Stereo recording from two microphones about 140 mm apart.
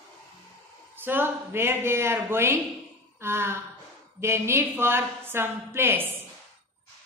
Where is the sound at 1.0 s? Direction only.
15° right (ahead or behind).